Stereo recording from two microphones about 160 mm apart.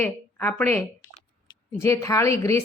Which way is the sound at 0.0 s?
15° left (ahead or behind).